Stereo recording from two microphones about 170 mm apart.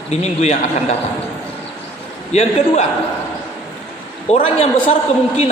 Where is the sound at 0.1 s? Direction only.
40° left (ahead or behind).